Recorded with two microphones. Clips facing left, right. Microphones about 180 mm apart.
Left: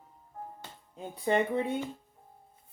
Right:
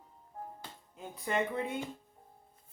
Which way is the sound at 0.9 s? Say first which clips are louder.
Left 6 dB; 30° left (ahead or behind).